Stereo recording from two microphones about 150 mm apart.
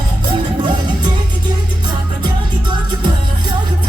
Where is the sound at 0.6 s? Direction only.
30° right (ahead or behind).